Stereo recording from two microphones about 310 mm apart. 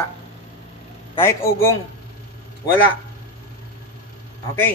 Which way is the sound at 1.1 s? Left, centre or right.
Centre.